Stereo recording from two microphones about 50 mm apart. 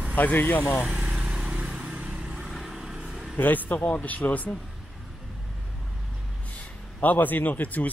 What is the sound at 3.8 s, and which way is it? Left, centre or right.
Speech, left.